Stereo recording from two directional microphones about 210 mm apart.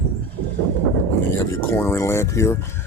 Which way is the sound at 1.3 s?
10° left (ahead or behind).